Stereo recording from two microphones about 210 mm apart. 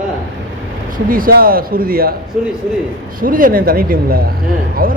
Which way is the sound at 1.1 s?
45° right (ahead or behind).